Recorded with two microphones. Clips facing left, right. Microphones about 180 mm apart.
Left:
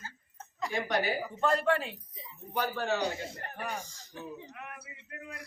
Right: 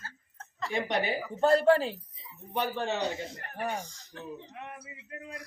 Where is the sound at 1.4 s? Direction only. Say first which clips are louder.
Right 6 dB; 35° right (ahead or behind).